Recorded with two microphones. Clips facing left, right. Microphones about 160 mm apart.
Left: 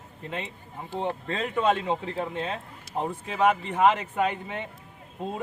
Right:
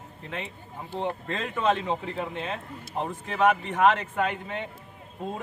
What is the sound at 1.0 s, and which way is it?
Speech, 15° left (ahead or behind).